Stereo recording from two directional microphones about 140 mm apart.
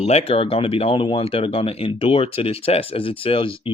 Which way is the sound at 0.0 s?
45° left (ahead or behind).